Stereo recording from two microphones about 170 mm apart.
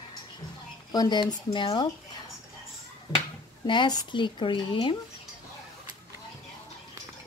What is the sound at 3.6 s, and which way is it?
Speech, 30° left (ahead or behind).